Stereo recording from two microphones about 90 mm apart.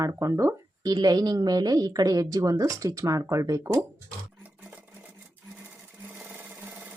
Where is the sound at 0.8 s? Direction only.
50° right (ahead or behind).